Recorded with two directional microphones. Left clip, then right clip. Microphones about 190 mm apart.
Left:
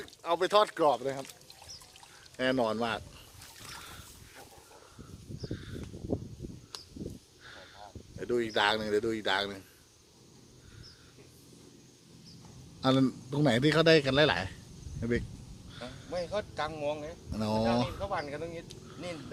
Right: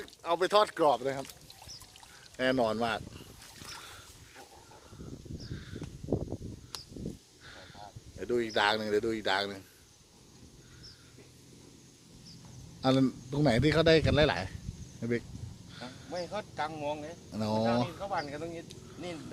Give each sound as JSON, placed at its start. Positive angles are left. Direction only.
{"t": 0.0, "sound": "speech", "side_deg": 0}
{"t": 2.3, "sound": "boat", "side_deg": 0}
{"t": 5.5, "sound": "crow", "side_deg": 0}
{"t": 6.7, "sound": "a sound", "side_deg": -35}
{"t": 7.4, "sound": "speech", "side_deg": 0}
{"t": 12.8, "sound": "a man's voice", "side_deg": 5}
{"t": 15.7, "sound": "a sound", "side_deg": 0}
{"t": 16.1, "sound": "speech", "side_deg": 50}
{"t": 17.3, "sound": "a man's voice", "side_deg": 0}
{"t": 18.0, "sound": "speech", "side_deg": 50}